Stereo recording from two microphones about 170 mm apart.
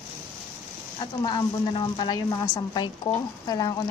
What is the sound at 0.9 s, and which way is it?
A woman's voice, 30° left (ahead or behind).